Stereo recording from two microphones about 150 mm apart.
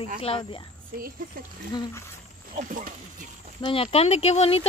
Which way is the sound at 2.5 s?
65° right (ahead or behind).